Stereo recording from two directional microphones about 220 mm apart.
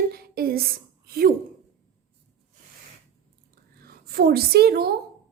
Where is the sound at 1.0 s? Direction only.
45° right (ahead or behind).